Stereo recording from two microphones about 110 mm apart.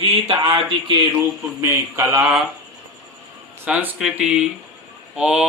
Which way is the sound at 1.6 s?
20° right (ahead or behind).